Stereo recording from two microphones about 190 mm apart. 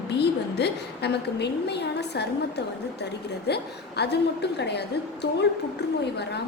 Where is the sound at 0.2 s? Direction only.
60° left (ahead or behind).